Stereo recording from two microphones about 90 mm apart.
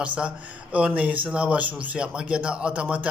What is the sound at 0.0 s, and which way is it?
Speech, 15° right (ahead or behind).